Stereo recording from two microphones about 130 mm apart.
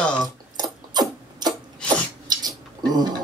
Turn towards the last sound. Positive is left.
turn(degrees=-30)  # may be behind; listen again after turning